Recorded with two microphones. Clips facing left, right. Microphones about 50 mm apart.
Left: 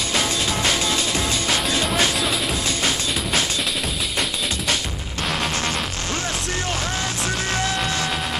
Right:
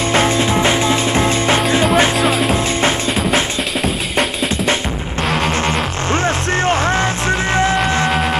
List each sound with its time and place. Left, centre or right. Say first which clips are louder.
0.1 s music: right 8 dB; right
5.7 s music: right 8 dB; right